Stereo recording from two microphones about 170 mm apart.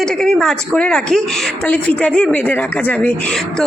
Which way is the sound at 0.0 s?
5° left (ahead or behind).